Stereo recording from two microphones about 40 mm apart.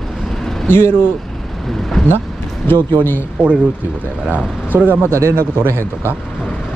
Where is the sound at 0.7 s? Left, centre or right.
Left.